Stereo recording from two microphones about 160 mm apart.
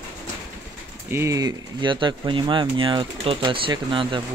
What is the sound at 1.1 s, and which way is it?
Speech, 20° right (ahead or behind).